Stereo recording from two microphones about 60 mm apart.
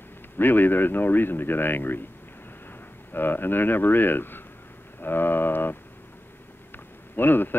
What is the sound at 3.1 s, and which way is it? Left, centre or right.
Speech, left.